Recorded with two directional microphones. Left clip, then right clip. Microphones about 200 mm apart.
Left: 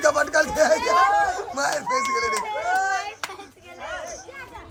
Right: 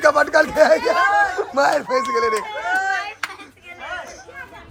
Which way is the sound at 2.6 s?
30° left (ahead or behind).